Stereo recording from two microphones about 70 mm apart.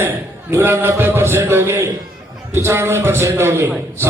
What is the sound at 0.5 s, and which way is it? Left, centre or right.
Music, right.